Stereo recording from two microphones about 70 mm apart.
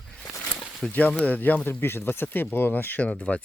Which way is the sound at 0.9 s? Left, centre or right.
Left.